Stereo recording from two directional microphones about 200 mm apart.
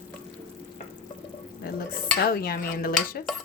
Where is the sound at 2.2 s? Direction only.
50° left (ahead or behind).